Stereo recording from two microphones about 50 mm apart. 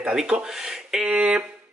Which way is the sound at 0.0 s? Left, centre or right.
Centre.